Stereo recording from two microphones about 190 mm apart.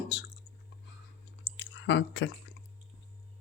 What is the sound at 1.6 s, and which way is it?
Squish, 70° left (ahead or behind).